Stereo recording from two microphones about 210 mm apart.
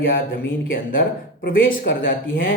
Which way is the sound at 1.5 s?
55° left (ahead or behind).